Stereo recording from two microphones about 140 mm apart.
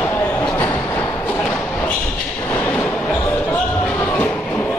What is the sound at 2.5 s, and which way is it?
Train, 15° left (ahead or behind).